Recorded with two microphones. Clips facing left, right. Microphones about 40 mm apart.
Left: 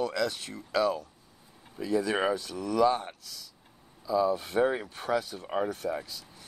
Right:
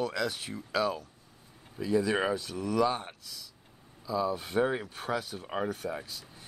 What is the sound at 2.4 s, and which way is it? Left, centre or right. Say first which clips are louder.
Speech: left 2 dB; centre.